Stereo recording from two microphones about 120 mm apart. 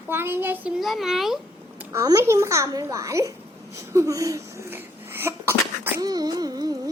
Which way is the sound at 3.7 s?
25° right (ahead or behind).